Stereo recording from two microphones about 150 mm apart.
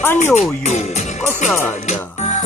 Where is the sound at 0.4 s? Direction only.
50° left (ahead or behind).